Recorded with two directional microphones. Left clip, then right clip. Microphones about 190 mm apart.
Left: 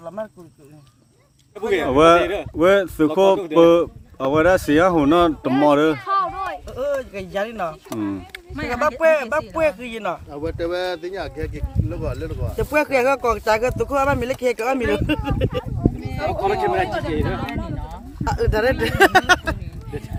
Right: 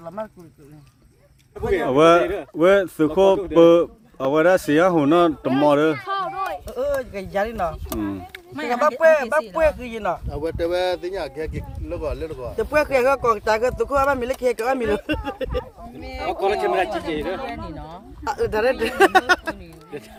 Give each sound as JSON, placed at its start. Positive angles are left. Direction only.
{"t": 1.8, "sound": "speech", "side_deg": 5}
{"t": 2.2, "sound": "speech", "side_deg": 25}
{"t": 2.6, "sound": "speech", "side_deg": 5}
{"t": 8.5, "sound": "speech", "side_deg": -55}
{"t": 8.8, "sound": "speech", "side_deg": 0}
{"t": 10.2, "sound": "speech", "side_deg": -45}
{"t": 12.5, "sound": "speech", "side_deg": 0}
{"t": 16.4, "sound": "speech", "side_deg": -15}
{"t": 17.5, "sound": "a sound", "side_deg": -60}
{"t": 18.3, "sound": "speech", "side_deg": 0}